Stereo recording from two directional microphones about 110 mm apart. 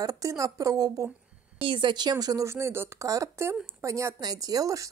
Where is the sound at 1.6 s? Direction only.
50° right (ahead or behind).